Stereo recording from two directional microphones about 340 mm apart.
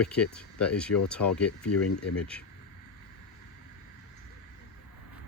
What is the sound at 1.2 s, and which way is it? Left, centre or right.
Speech, left.